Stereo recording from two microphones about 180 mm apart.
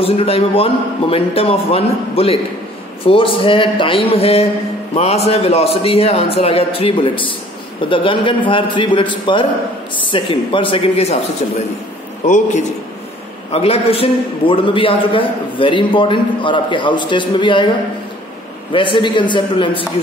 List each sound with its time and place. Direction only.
0.0 s a man's voice: 30° left (ahead or behind)
13.5 s a man's voice: 35° left (ahead or behind)